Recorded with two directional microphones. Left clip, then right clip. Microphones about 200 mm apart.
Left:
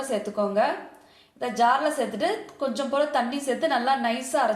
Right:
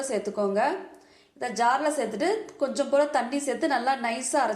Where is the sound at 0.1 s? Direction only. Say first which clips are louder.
Left 2 dB; 25° right (ahead or behind).